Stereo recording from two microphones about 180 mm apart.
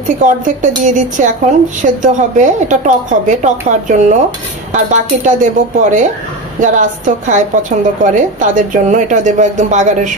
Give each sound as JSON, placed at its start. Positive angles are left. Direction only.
{"t": 0.2, "sound": "a woman's voice", "side_deg": -45}